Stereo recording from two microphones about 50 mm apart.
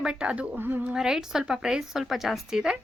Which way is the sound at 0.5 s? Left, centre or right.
Right.